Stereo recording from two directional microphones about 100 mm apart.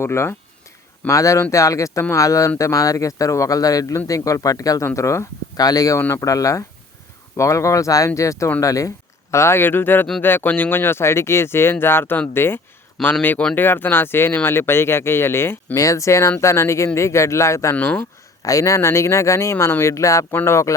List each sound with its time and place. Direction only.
0.0 s speech: 25° left (ahead or behind)
13.0 s speech: centre (ahead or behind)
13.6 s speech: 20° left (ahead or behind)
17.7 s speech: 15° left (ahead or behind)
18.4 s speech: 35° left (ahead or behind)